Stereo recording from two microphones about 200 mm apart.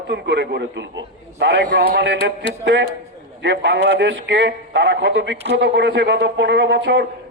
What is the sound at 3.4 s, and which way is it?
A man's voice, 60° right (ahead or behind).